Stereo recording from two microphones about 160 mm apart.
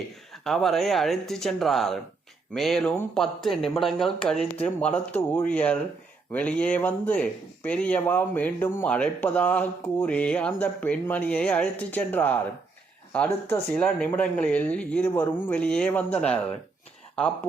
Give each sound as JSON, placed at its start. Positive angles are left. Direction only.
{"t": 0.4, "sound": "speech", "side_deg": 0}